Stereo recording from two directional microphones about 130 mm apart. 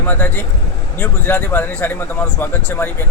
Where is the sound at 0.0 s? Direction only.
15° left (ahead or behind).